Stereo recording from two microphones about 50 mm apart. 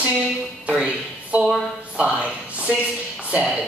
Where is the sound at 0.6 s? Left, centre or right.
Right.